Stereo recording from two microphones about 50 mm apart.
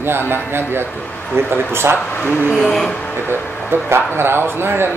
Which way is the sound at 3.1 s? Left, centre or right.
Left.